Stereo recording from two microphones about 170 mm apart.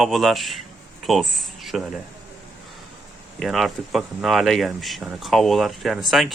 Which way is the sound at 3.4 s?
Centre (ahead or behind).